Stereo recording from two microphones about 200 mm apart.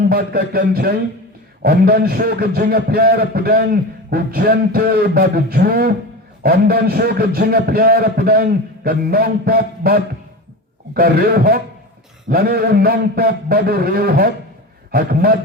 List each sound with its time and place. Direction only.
0.0 s a man's voice: 50° right (ahead or behind)